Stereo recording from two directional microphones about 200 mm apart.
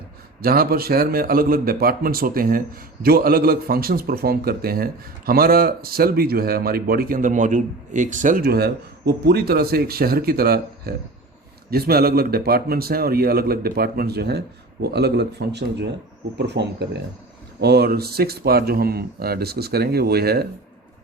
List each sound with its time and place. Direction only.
0.4 s a man's voice: 50° right (ahead or behind)